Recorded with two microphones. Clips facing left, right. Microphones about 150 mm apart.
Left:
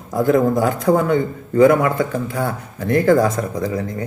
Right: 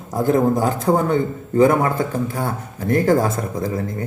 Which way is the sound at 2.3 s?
45° left (ahead or behind).